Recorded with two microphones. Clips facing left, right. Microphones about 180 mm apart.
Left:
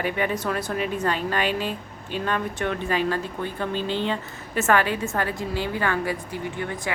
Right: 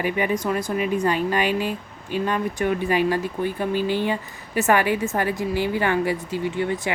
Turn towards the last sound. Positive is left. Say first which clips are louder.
# right 5 dB
turn(degrees=-20)  # may be behind; listen again after turning